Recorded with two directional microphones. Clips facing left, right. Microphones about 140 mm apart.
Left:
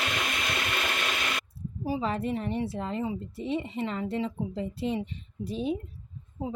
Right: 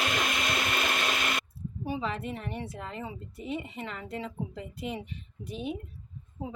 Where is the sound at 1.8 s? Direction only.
35° left (ahead or behind).